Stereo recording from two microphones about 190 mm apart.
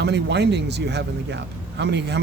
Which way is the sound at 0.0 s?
60° right (ahead or behind).